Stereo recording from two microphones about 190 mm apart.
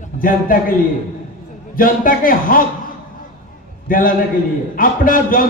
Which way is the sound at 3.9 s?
45° left (ahead or behind).